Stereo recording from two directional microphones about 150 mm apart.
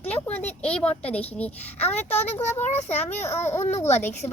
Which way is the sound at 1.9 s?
45° left (ahead or behind).